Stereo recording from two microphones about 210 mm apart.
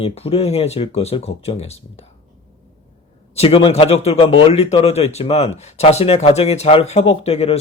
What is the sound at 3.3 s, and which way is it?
Speech, 25° left (ahead or behind).